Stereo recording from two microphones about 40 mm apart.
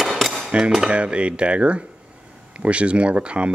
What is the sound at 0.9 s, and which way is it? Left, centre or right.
Speech, right.